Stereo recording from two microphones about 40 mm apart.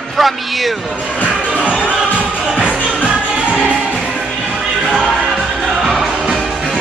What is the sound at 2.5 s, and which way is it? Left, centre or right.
Music, right.